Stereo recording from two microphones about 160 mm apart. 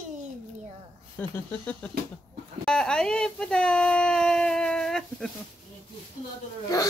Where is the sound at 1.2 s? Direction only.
10° left (ahead or behind).